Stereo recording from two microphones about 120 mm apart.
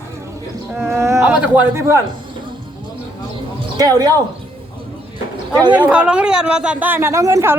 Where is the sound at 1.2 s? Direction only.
10° right (ahead or behind).